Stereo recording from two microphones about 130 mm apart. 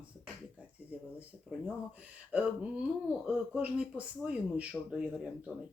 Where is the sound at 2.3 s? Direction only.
10° right (ahead or behind).